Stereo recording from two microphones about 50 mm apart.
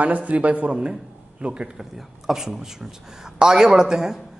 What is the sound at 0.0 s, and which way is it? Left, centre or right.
Speech, right.